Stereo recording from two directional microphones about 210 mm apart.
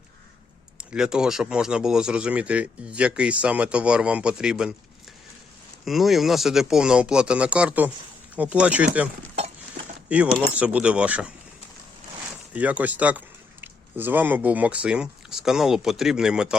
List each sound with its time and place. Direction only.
0.9 s speech: 5° right (ahead or behind)
5.8 s speech: centre (ahead or behind)
10.1 s speech: 5° right (ahead or behind)
12.3 s speech: 5° right (ahead or behind)